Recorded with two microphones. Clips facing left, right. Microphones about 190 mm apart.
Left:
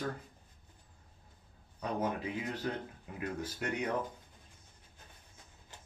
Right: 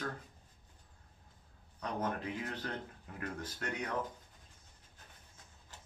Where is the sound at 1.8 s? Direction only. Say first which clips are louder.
Left 3 dB; 10° left (ahead or behind).